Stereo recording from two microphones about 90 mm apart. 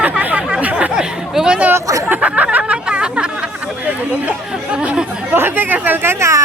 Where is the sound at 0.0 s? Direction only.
15° right (ahead or behind).